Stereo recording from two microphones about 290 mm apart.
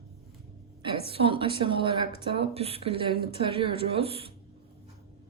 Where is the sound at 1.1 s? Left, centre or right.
Centre.